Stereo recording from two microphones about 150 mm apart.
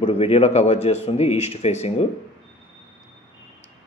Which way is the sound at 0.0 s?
40° left (ahead or behind).